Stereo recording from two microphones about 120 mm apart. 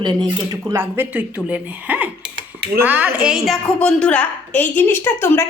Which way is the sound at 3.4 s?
5° left (ahead or behind).